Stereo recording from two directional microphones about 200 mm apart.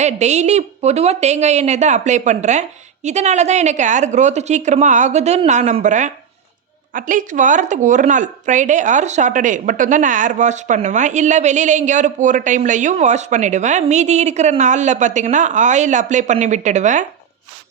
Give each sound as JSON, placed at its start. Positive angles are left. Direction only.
{"t": 0.0, "sound": "speech", "side_deg": -35}